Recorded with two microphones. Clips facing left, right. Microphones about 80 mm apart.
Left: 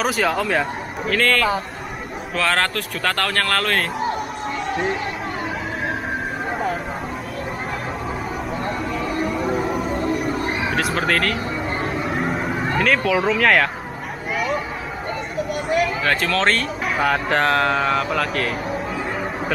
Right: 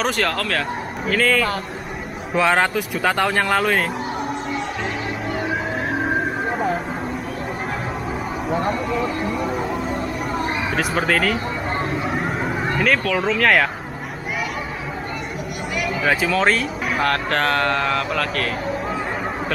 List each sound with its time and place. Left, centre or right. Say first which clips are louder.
0.0 s speech: left 1 dB; centre
1.0 s speech: even; centre
2.3 s speech: right 3 dB; centre
9.2 s music: left 1 dB; centre
10.7 s speech: right 1 dB; centre
12.0 s a sound: even; centre
16.0 s speech: right 1 dB; centre